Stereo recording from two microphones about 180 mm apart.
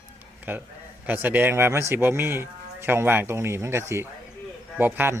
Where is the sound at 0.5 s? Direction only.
10° right (ahead or behind).